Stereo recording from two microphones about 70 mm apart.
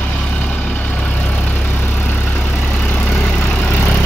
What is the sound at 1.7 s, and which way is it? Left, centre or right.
Vehicle, left.